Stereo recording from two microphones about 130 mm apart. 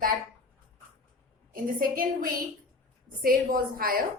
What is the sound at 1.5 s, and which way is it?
A woman's voice, 90° right.